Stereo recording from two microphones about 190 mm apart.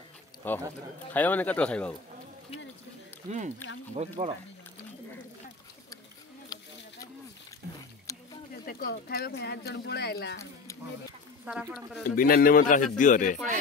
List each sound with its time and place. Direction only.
0.4 s speech: 10° left (ahead or behind)
3.3 s speech: 40° right (ahead or behind)
6.5 s a sound: 20° left (ahead or behind)
8.1 s a sound: 15° left (ahead or behind)
8.6 s speech: 55° left (ahead or behind)
11.4 s speech: 5° right (ahead or behind)
12.2 s speech: 50° left (ahead or behind)